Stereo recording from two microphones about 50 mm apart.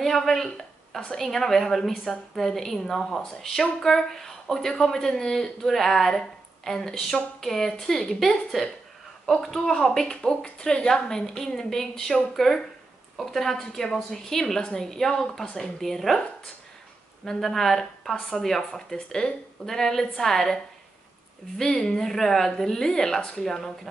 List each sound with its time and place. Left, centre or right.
0.0 s a woman's voice: centre
17.2 s a woman's voice: centre